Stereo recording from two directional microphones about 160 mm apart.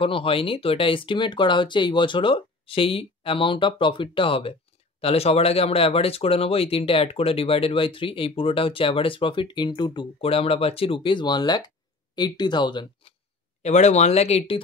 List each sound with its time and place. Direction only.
0.0 s speech: 35° left (ahead or behind)
13.6 s speech: 45° left (ahead or behind)